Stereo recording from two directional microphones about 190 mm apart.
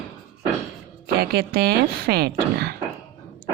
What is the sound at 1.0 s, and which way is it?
Speech, 55° right (ahead or behind).